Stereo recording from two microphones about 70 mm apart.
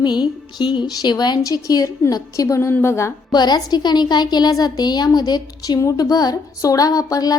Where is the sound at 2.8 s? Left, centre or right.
Left.